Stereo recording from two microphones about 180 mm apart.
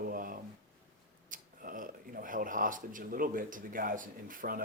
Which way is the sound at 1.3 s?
50° right (ahead or behind).